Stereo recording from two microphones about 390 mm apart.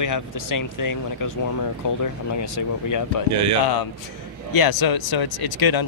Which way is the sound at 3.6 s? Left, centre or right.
Left.